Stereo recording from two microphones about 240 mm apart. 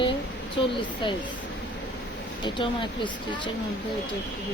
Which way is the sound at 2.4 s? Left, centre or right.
Centre.